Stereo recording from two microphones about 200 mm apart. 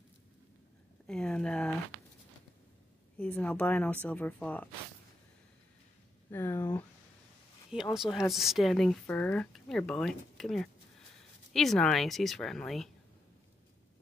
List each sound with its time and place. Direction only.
1.0 s speech: 5° left (ahead or behind)
3.2 s speech: 5° left (ahead or behind)
6.3 s speech: 10° left (ahead or behind)
7.9 s speech: centre (ahead or behind)